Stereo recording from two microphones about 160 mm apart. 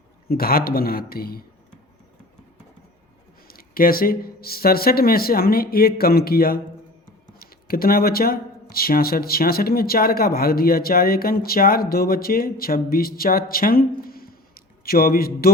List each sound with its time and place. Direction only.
0.3 s speech: 70° left (ahead or behind)
3.4 s speech: 65° left (ahead or behind)